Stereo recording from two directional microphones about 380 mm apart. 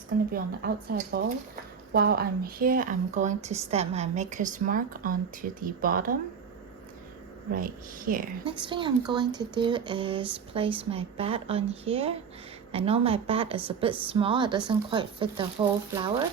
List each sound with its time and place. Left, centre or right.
0.3 s speech: right
7.5 s speech: right